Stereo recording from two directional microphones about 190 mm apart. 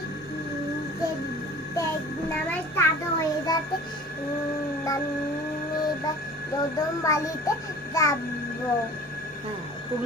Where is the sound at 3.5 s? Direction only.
20° left (ahead or behind).